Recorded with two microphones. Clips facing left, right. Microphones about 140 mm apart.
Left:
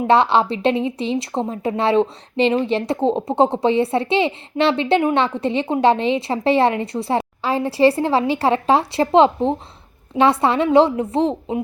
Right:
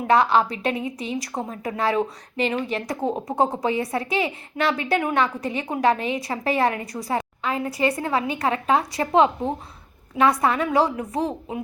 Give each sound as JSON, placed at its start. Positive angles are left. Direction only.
{"t": 0.1, "sound": "a woman's voice", "side_deg": 30}